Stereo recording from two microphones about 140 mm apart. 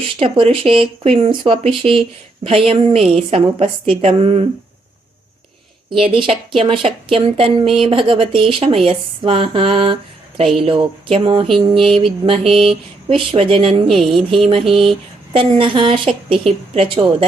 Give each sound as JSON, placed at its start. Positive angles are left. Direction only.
{"t": 0.2, "sound": "a woman's voice", "side_deg": -45}
{"t": 6.6, "sound": "a woman's voice", "side_deg": -40}
{"t": 13.9, "sound": "speech", "side_deg": 0}
{"t": 14.3, "sound": "a woman's voice", "side_deg": -45}